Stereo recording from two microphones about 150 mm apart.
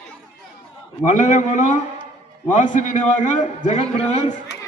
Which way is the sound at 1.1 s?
55° left (ahead or behind).